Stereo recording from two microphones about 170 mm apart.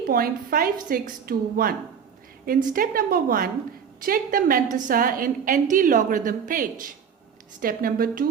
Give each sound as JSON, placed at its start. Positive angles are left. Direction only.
{"t": 0.0, "sound": "a woman's voice", "side_deg": -55}
{"t": 2.7, "sound": "a woman's voice", "side_deg": -55}